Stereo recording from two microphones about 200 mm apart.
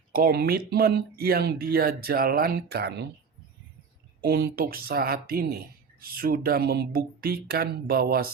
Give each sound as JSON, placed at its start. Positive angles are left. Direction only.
{"t": 0.1, "sound": "speech", "side_deg": -50}
{"t": 4.2, "sound": "speech", "side_deg": -50}